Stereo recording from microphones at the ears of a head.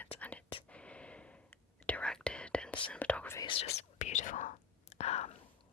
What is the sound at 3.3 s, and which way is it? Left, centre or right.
Whispering, left.